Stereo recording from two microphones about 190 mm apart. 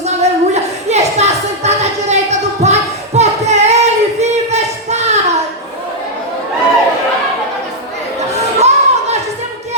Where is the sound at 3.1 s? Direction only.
35° right (ahead or behind).